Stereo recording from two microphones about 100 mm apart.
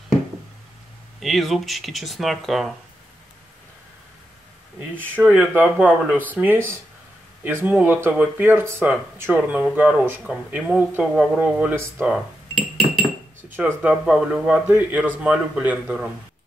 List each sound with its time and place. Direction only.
1.2 s speech: centre (ahead or behind)
4.7 s speech: 20° right (ahead or behind)
12.1 s cutlery: 5° right (ahead or behind)
13.5 s speech: 20° right (ahead or behind)